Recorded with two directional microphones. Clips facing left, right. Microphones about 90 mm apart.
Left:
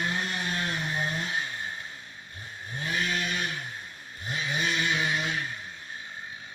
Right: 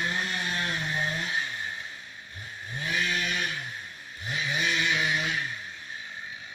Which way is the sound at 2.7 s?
35° left (ahead or behind).